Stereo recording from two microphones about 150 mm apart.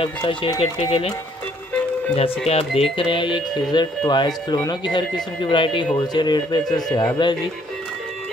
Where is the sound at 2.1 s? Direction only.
40° left (ahead or behind).